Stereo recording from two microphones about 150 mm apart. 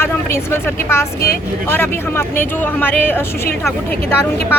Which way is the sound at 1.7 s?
15° left (ahead or behind).